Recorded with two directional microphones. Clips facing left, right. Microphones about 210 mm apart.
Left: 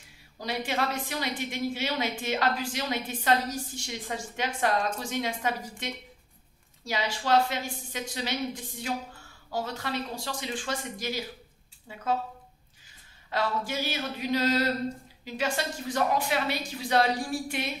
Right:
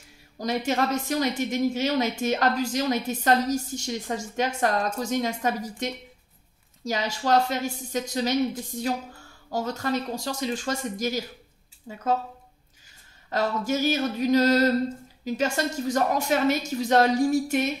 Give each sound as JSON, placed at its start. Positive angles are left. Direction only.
{"t": 0.4, "sound": "a woman's voice", "side_deg": -45}
{"t": 13.3, "sound": "a woman's voice", "side_deg": -45}